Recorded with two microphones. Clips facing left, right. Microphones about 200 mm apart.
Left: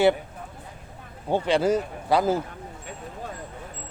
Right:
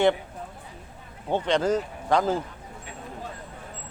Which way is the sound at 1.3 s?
10° left (ahead or behind).